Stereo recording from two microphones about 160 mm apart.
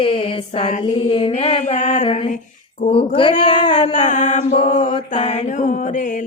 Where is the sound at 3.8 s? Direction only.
50° left (ahead or behind).